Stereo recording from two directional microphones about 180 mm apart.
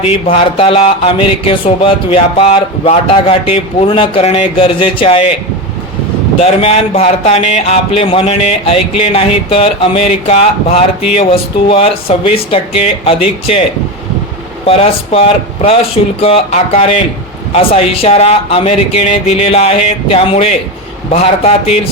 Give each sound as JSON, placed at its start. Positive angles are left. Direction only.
{"t": 0.0, "sound": "speech", "side_deg": 35}
{"t": 6.4, "sound": "speech", "side_deg": 35}
{"t": 14.7, "sound": "speech", "side_deg": 35}